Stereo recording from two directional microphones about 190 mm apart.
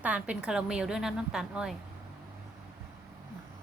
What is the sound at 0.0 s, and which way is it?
A woman's voice, 5° right (ahead or behind).